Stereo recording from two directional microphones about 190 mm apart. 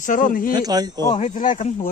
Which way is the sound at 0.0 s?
45° left (ahead or behind).